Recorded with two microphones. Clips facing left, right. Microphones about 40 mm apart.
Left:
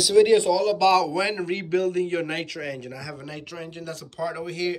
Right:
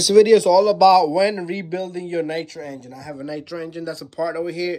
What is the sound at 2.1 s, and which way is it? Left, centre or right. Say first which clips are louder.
Speech: right 4 dB; left.